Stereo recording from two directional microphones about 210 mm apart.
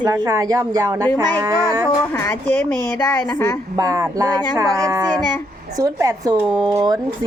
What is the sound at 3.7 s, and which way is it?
Speech, 15° right (ahead or behind).